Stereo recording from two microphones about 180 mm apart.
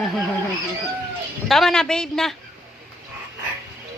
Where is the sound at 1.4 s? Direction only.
Centre (ahead or behind).